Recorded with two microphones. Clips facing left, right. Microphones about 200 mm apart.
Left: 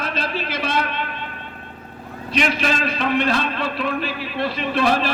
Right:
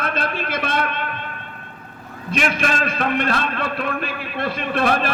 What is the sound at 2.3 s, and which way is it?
A man's voice, 50° right (ahead or behind).